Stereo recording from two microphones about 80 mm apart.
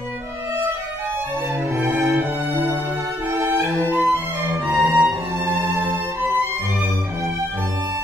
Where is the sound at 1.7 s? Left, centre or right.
Right.